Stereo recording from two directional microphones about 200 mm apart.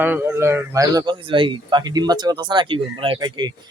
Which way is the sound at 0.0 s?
10° right (ahead or behind).